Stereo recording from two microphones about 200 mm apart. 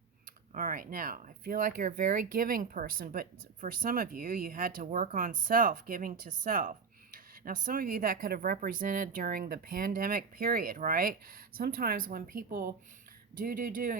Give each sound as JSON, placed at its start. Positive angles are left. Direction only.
{"t": 0.5, "sound": "speech", "side_deg": -45}